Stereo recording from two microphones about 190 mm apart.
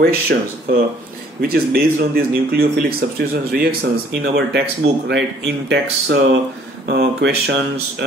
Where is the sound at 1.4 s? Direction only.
55° right (ahead or behind).